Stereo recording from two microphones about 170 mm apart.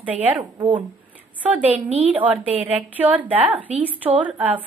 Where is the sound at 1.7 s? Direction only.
35° right (ahead or behind).